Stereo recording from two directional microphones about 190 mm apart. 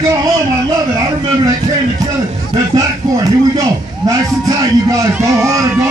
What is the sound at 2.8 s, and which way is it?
A man's voice, 20° right (ahead or behind).